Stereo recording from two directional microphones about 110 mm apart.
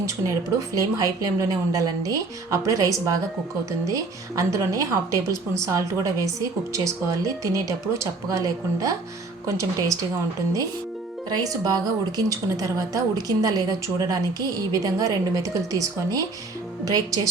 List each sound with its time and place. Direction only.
0.0 s a woman's voice: 30° right (ahead or behind)
11.3 s a woman's voice: 35° right (ahead or behind)